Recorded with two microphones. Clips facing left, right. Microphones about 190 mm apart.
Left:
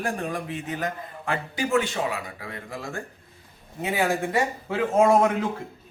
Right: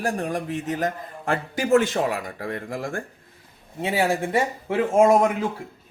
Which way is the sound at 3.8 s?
30° right (ahead or behind).